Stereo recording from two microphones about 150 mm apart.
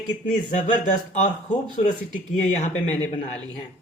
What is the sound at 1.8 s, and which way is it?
Speech, 55° left (ahead or behind).